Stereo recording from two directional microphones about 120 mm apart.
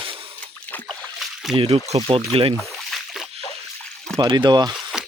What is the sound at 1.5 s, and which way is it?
Speech, 55° right (ahead or behind).